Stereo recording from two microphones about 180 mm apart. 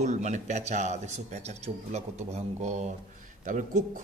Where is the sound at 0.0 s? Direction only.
40° right (ahead or behind).